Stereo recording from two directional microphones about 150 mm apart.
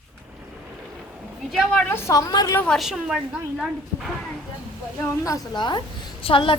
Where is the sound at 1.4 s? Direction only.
Centre (ahead or behind); by 2.6 s 25° left (ahead or behind).